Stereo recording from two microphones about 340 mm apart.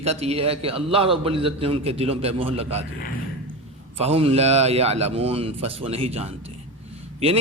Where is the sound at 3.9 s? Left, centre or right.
Centre.